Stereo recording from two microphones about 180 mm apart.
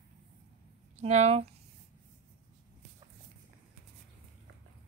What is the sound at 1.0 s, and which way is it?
Speech, 35° right (ahead or behind).